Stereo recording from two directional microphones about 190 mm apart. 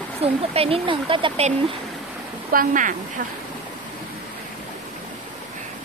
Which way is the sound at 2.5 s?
45° right (ahead or behind).